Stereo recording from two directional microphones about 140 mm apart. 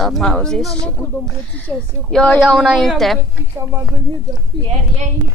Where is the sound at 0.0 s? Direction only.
5° left (ahead or behind).